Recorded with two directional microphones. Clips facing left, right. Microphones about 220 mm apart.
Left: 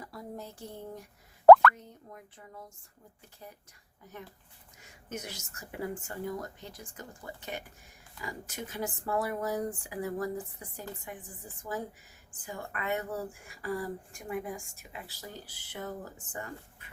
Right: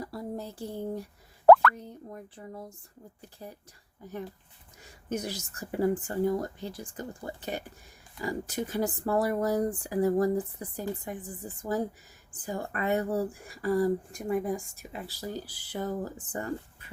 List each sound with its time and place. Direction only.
0.0 s speech: 35° right (ahead or behind)
5.0 s speech: 35° right (ahead or behind)